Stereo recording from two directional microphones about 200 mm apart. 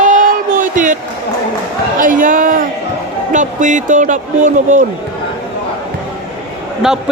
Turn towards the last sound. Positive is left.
turn(degrees=-5)  # may be behind; listen again after turning